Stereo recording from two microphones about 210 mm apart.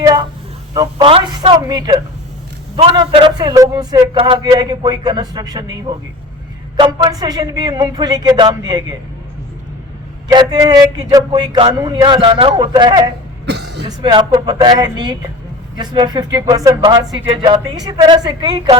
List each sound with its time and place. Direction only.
0.0 s a sound: 20° right (ahead or behind)
0.7 s speech: 20° right (ahead or behind)
6.7 s speech: 20° right (ahead or behind)
10.3 s speech: 20° right (ahead or behind)
13.4 s cough: 55° right (ahead or behind)
13.8 s speech: 20° right (ahead or behind)